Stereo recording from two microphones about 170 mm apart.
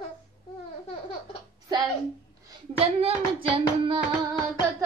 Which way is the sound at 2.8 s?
35° right (ahead or behind).